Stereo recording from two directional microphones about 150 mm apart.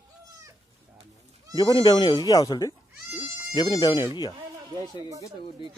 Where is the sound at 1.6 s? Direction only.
30° left (ahead or behind).